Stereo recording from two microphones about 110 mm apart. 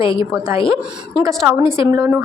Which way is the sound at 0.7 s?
30° right (ahead or behind).